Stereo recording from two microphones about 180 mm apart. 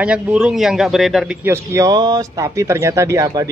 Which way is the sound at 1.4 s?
15° right (ahead or behind).